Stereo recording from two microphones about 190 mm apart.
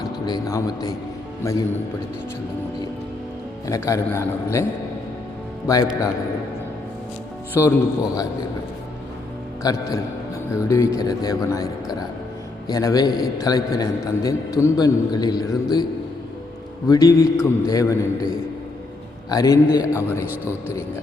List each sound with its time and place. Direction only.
0.3 s a man's voice: 20° left (ahead or behind)
3.7 s a man's voice: 15° left (ahead or behind)
5.7 s a man's voice: 20° left (ahead or behind)
7.5 s a man's voice: 15° left (ahead or behind)
9.6 s a man's voice: 20° left (ahead or behind)
16.9 s a man's voice: 20° left (ahead or behind)
19.3 s a man's voice: 20° left (ahead or behind)
19.8 s speech: 10° right (ahead or behind)